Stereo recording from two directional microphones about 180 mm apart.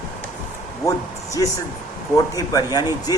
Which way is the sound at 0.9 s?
15° left (ahead or behind).